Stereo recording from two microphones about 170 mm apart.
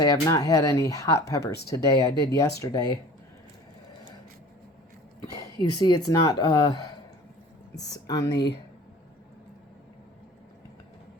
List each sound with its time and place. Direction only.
0.0 s speech: 20° left (ahead or behind)
5.8 s speech: 20° left (ahead or behind)